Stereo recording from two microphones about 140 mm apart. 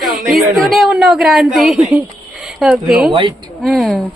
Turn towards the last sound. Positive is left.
turn(degrees=0)  # may be behind; listen again after turning